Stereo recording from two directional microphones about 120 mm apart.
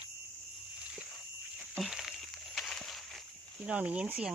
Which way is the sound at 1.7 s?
Centre (ahead or behind).